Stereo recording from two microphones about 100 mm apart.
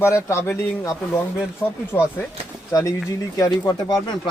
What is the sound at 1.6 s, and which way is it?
Speech, 20° left (ahead or behind).